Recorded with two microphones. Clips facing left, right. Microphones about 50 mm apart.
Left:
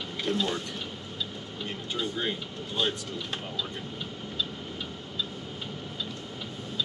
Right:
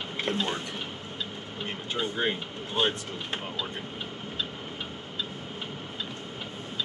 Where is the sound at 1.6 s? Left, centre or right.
Right.